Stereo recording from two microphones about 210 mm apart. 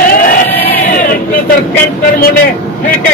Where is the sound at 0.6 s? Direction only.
45° left (ahead or behind).